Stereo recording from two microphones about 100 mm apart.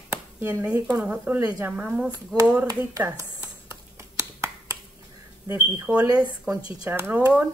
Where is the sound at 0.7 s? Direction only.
35° right (ahead or behind).